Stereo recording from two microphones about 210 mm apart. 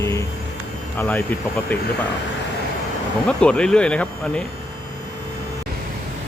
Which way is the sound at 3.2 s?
5° left (ahead or behind).